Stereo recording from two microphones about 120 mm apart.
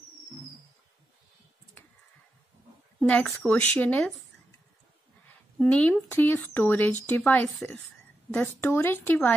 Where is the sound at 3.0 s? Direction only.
10° left (ahead or behind).